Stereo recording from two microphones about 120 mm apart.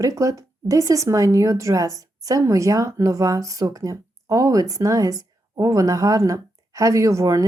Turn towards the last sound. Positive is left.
turn(degrees=-25)  # may be behind; listen again after turning